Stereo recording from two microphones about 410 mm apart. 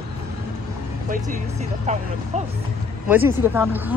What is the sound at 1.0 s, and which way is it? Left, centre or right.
Speech, centre.